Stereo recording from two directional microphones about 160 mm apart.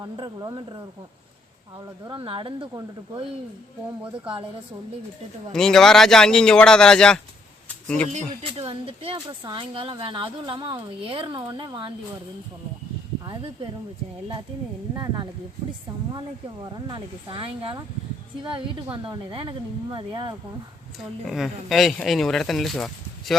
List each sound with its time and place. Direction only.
0.0 s speech: 25° right (ahead or behind)
2.0 s speech: 35° right (ahead or behind)
5.5 s speech: 5° left (ahead or behind)
8.1 s speech: 40° right (ahead or behind)
13.2 s speech: 30° right (ahead or behind)
14.9 s speech: 25° right (ahead or behind)
16.7 s speech: 25° right (ahead or behind)
21.2 s speech: centre (ahead or behind)